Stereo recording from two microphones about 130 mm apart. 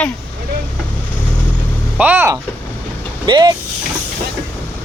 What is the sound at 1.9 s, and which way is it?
Speech, 15° right (ahead or behind).